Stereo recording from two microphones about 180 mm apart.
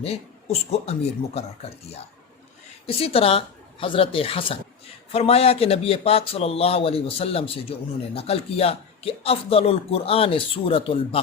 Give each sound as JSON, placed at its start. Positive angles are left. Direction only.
{"t": 0.0, "sound": "a man's voice", "side_deg": 35}
{"t": 2.8, "sound": "a man's voice", "side_deg": 30}